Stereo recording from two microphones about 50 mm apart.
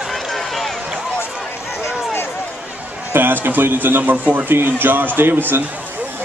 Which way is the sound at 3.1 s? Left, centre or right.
Right.